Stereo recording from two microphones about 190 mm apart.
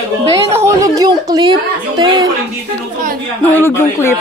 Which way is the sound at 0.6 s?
15° right (ahead or behind).